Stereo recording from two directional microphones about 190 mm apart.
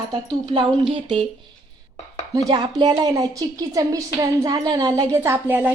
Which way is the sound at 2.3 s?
20° right (ahead or behind).